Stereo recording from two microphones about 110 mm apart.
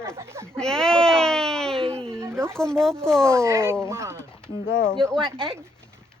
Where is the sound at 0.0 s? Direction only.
25° right (ahead or behind).